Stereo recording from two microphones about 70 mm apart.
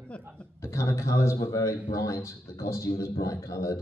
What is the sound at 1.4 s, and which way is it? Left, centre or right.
A man's voice, left.